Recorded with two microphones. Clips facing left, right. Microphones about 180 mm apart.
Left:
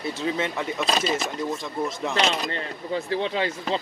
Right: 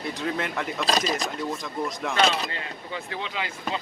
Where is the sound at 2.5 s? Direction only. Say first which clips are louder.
Left 6 dB; 35° left (ahead or behind).